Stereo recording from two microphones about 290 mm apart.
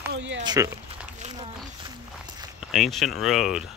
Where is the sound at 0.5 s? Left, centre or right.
Centre.